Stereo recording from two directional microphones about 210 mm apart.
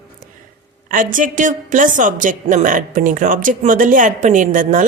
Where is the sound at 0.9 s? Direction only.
40° right (ahead or behind).